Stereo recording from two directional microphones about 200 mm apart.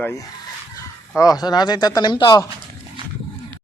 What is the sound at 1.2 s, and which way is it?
Speech, 20° left (ahead or behind).